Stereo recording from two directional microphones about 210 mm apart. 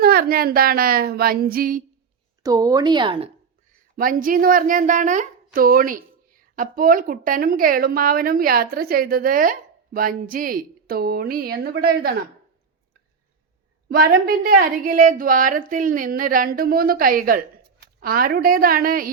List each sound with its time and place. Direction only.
0.0 s speech: 45° right (ahead or behind)
2.4 s speech: 15° right (ahead or behind)
3.9 s a woman's voice: 40° right (ahead or behind)
13.9 s speech: 45° right (ahead or behind)